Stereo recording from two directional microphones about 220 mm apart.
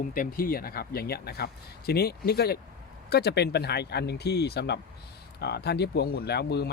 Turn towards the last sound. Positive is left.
turn(degrees=50)  # may be behind; listen again after turning